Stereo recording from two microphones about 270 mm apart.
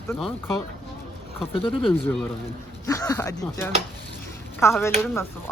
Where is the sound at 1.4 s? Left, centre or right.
Centre.